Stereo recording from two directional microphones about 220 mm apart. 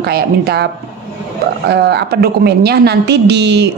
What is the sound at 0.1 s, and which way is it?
Speech, 45° right (ahead or behind).